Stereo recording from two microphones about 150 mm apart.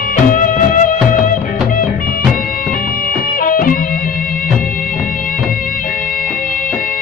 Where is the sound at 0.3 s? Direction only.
65° left (ahead or behind).